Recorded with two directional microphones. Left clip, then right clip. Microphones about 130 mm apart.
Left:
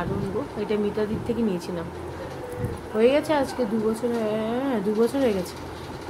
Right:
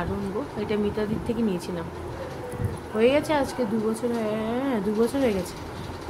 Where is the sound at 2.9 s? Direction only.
15° right (ahead or behind).